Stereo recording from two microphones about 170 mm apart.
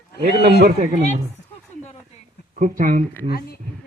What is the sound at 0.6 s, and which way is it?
Speech, 60° right (ahead or behind).